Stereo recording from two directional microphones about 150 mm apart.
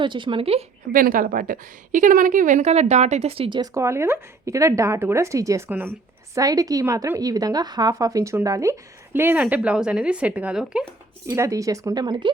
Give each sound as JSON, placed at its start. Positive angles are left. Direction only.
{"t": 0.0, "sound": "speech", "side_deg": -30}
{"t": 0.9, "sound": "a woman's voice", "side_deg": -65}
{"t": 3.8, "sound": "a woman's voice", "side_deg": -20}
{"t": 11.3, "sound": "a woman's voice", "side_deg": -20}